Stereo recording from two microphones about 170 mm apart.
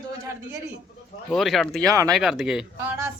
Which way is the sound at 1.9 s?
20° right (ahead or behind).